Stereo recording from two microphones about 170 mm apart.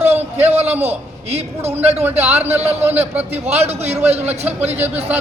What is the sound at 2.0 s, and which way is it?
Speech, 10° right (ahead or behind).